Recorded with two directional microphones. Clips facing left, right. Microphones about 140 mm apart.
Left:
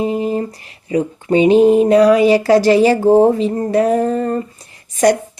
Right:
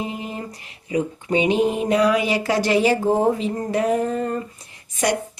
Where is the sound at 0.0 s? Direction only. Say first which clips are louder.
Left 11 dB; 35° left (ahead or behind).